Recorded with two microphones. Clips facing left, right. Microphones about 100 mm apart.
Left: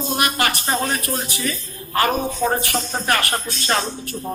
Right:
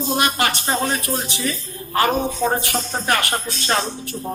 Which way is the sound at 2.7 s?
5° right (ahead or behind).